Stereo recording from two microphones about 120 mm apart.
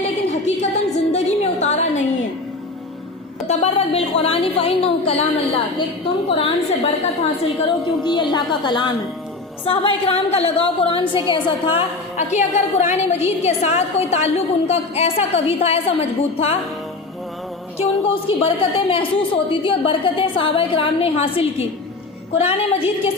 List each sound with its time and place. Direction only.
0.0 s music: 65° left (ahead or behind)
3.4 s a sound: 60° left (ahead or behind)
6.2 s a woman's voice: 50° left (ahead or behind)
8.0 s a woman's voice: 40° left (ahead or behind)
9.6 s a woman's voice: 55° left (ahead or behind)
12.1 s a woman's voice: 75° left (ahead or behind); by 16.6 s 55° left (ahead or behind)
17.7 s a woman's voice: 50° left (ahead or behind)